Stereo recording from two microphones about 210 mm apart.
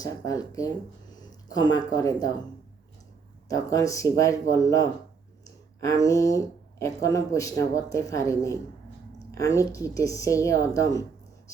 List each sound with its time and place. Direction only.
0.0 s speech: 15° left (ahead or behind)
3.5 s speech: 15° left (ahead or behind)